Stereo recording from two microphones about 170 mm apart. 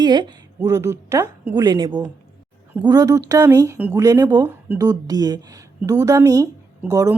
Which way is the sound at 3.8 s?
10° right (ahead or behind).